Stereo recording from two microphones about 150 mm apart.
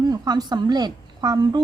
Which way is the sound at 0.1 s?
25° right (ahead or behind).